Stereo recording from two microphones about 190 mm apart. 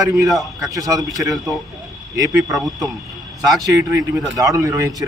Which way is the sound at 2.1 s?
20° right (ahead or behind).